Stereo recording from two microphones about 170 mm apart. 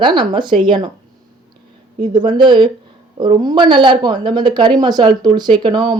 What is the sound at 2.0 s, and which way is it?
Speech, 25° right (ahead or behind).